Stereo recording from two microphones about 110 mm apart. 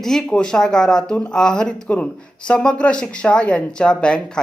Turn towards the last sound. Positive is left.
turn(degrees=10)  # may be behind; listen again after turning